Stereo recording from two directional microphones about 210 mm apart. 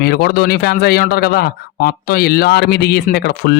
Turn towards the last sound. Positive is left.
turn(degrees=50)  # may be behind; listen again after turning